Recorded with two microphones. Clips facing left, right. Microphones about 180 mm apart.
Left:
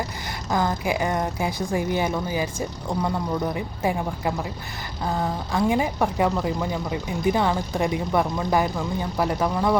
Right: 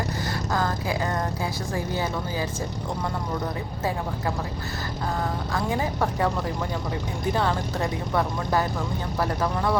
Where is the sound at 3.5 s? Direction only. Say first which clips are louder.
Left 3 dB; 15° left (ahead or behind).